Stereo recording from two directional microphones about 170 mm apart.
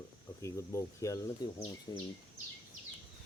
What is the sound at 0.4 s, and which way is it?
Speech, 15° left (ahead or behind).